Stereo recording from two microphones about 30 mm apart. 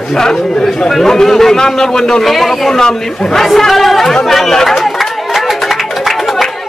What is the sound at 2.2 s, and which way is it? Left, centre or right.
Speech, centre.